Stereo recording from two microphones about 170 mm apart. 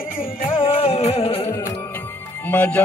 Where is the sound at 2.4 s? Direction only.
10° left (ahead or behind).